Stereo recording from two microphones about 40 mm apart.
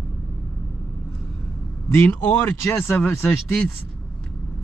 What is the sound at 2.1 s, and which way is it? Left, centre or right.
Speech, left.